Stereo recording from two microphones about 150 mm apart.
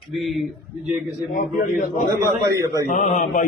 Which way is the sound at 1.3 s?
65° left (ahead or behind).